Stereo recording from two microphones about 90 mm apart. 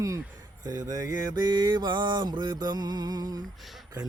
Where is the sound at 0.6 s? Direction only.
40° right (ahead or behind).